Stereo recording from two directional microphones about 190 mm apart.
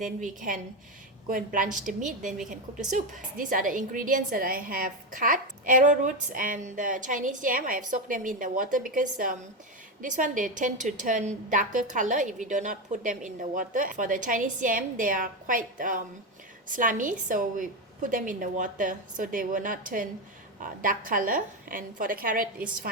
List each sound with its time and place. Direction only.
0.0 s a woman's voice: 40° right (ahead or behind)